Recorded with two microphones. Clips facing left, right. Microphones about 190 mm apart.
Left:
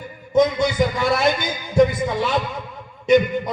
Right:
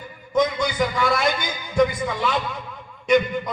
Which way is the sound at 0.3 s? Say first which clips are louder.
Left 4 dB; 25° left (ahead or behind).